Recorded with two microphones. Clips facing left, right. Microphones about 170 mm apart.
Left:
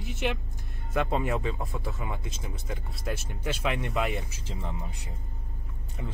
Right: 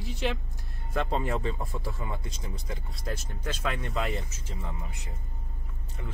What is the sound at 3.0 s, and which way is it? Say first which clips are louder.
Speech: left 2 dB; 10° left (ahead or behind).